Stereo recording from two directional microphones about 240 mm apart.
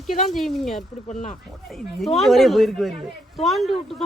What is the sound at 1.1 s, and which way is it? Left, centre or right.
Speech, left.